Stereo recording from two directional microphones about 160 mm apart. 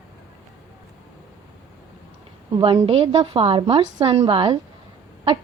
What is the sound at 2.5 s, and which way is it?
A woman's voice, 35° right (ahead or behind).